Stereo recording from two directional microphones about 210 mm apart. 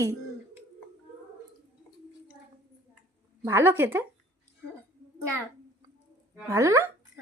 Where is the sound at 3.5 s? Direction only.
10° right (ahead or behind).